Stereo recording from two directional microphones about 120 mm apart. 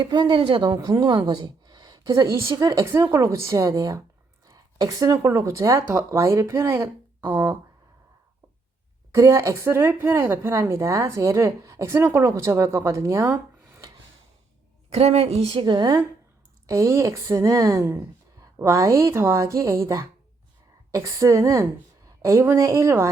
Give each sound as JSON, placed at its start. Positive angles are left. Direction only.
{"t": 0.0, "sound": "speech", "side_deg": -40}
{"t": 9.1, "sound": "speech", "side_deg": -25}
{"t": 14.8, "sound": "speech", "side_deg": -60}
{"t": 15.6, "sound": "speech", "side_deg": -35}
{"t": 16.6, "sound": "speech", "side_deg": -25}